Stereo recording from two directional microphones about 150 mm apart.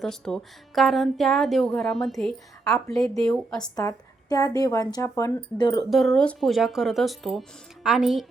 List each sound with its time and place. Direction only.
0.0 s a woman's voice: 5° left (ahead or behind)
3.8 s speech: 25° left (ahead or behind)
5.9 s a woman's voice: centre (ahead or behind)